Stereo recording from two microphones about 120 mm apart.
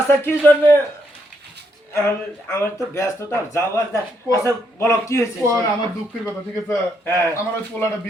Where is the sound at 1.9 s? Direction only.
20° left (ahead or behind).